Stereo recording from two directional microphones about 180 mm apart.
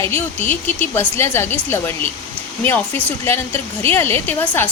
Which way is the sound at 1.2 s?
15° left (ahead or behind).